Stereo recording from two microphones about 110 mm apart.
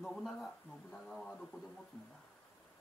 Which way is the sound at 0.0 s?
Centre (ahead or behind).